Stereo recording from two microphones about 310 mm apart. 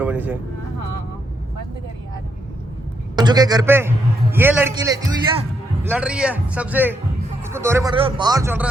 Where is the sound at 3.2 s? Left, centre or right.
Centre.